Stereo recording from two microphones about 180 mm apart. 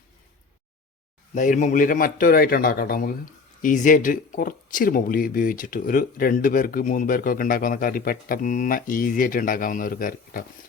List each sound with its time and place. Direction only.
1.4 s speech: 45° left (ahead or behind)